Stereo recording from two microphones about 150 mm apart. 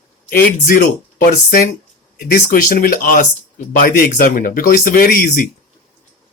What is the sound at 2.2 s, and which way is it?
Speech, 75° left (ahead or behind).